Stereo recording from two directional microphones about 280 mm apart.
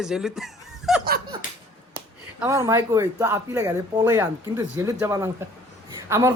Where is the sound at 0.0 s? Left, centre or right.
Centre.